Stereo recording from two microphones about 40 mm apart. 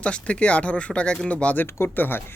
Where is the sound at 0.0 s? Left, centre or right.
Left.